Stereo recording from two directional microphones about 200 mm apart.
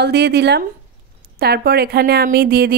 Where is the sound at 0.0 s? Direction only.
55° right (ahead or behind).